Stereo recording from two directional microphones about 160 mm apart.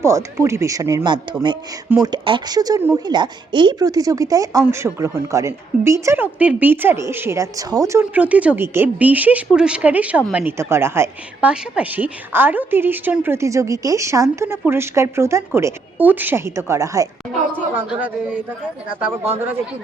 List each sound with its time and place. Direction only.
0.0 s speech: 20° right (ahead or behind)
8.1 s a woman's voice: 10° right (ahead or behind)
17.7 s a woman's voice: 10° right (ahead or behind)